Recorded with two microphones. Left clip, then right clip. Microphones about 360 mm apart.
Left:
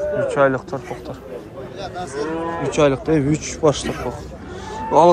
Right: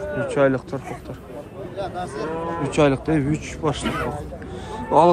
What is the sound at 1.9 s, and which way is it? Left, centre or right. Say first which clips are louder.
Moo: left 2 dB; right.